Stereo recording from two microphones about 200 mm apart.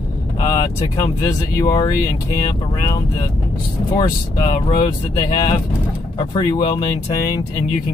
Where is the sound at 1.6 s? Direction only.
20° left (ahead or behind).